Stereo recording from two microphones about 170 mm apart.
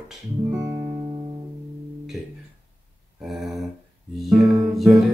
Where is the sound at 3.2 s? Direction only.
Centre (ahead or behind).